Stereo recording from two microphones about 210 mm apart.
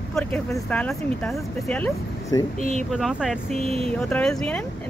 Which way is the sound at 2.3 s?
15° left (ahead or behind).